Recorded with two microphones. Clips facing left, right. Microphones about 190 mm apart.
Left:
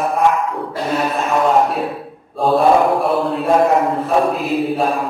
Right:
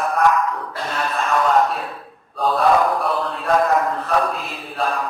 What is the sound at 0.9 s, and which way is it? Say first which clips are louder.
Mantra: left 4 dB; 15° left (ahead or behind).